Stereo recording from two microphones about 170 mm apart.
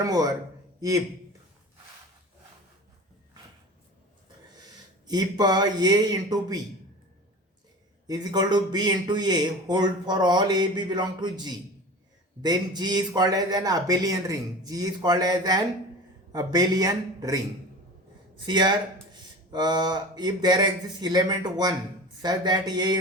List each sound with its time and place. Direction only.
0.0 s a man's voice: 20° right (ahead or behind)
5.0 s a man's voice: 25° right (ahead or behind)
8.0 s a man's voice: 25° right (ahead or behind)
18.4 s a man's voice: 25° right (ahead or behind)